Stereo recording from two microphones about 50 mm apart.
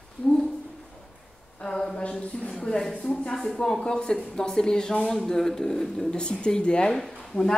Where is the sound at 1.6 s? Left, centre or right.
Centre.